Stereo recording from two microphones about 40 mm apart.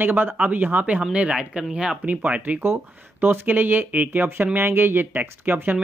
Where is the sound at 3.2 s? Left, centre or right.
Right.